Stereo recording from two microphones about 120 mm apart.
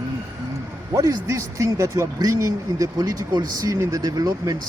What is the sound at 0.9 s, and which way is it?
Speech, 25° right (ahead or behind).